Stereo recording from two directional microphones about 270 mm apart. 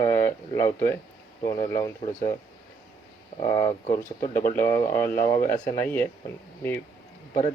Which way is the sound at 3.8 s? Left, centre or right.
Left.